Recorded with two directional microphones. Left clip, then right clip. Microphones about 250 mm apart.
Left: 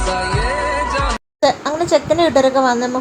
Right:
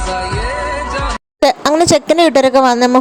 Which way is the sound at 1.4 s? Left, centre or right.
Right.